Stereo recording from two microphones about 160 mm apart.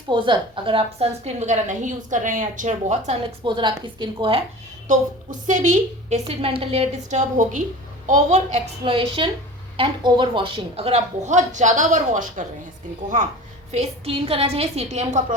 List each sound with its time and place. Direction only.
0.1 s a woman's voice: 30° right (ahead or behind)
3.4 s a woman's voice: 30° right (ahead or behind)
4.9 s a woman's voice: 50° right (ahead or behind)
13.7 s a woman's voice: 40° right (ahead or behind)